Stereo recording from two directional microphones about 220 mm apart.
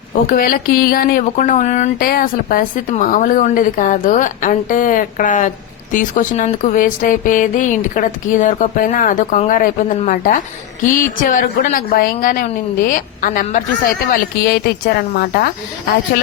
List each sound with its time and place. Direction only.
0.3 s speech: 40° left (ahead or behind)